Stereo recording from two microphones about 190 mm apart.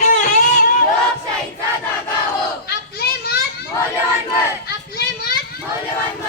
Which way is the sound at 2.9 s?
55° left (ahead or behind).